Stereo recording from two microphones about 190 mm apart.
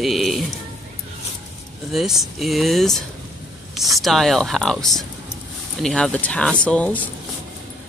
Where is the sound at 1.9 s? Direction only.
Centre (ahead or behind).